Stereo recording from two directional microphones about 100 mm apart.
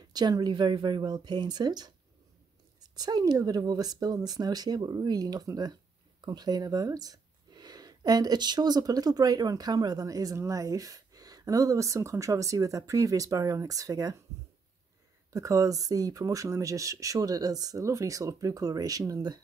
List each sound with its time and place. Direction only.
0.1 s speech: 45° right (ahead or behind)
3.0 s speech: 45° right (ahead or behind)
15.3 s speech: 35° right (ahead or behind)